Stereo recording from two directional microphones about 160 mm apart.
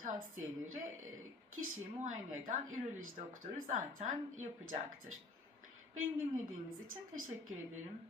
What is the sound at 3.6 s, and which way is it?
Speech, 55° right (ahead or behind).